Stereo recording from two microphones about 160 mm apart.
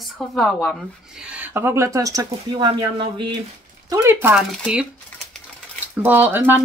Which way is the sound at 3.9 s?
15° right (ahead or behind).